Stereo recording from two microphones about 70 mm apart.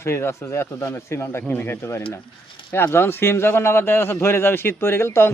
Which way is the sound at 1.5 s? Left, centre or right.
Left.